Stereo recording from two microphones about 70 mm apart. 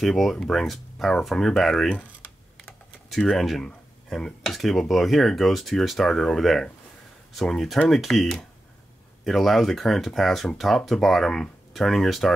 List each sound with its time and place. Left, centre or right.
0.0 s speech: centre
1.9 s computer keyboard: centre
3.1 s speech: centre